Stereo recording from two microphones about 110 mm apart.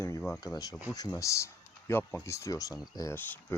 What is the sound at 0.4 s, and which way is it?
Speech, 35° left (ahead or behind).